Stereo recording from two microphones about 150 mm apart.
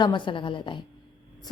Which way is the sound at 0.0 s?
30° left (ahead or behind).